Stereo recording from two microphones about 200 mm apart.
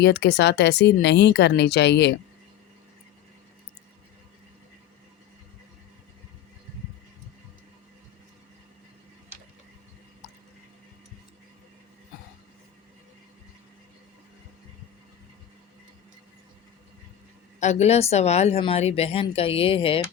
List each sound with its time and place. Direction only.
0.0 s a woman's voice: 55° left (ahead or behind)
17.6 s speech: 35° left (ahead or behind)